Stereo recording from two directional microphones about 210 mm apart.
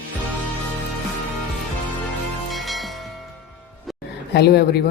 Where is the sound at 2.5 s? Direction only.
Centre (ahead or behind).